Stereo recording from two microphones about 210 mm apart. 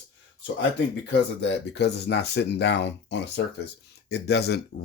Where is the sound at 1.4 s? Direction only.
55° left (ahead or behind).